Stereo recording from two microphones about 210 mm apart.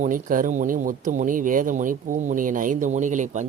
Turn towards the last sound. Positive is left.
turn(degrees=-35)  # may be behind; listen again after turning